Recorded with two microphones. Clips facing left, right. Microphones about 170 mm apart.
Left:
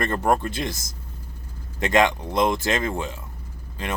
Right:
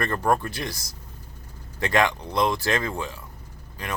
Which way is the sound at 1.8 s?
20° left (ahead or behind).